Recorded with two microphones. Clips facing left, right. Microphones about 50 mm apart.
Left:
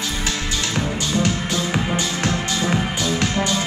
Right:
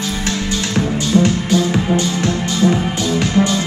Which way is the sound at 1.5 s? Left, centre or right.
Centre.